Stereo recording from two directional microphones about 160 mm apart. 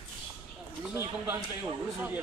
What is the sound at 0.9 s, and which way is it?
Speech, 15° right (ahead or behind).